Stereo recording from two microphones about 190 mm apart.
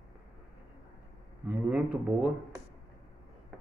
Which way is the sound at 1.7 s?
5° right (ahead or behind).